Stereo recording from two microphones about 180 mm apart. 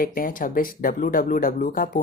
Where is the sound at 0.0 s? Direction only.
50° left (ahead or behind).